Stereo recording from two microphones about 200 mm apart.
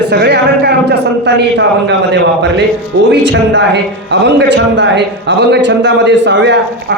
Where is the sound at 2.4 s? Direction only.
60° right (ahead or behind).